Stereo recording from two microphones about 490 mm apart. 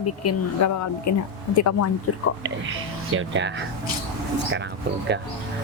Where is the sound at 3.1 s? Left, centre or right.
Right.